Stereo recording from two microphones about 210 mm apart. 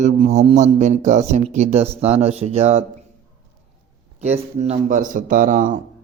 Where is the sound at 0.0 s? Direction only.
35° right (ahead or behind).